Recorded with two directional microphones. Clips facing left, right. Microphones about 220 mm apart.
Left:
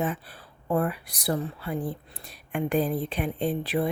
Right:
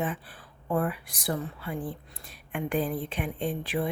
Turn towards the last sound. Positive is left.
turn(degrees=40)  # may be behind; listen again after turning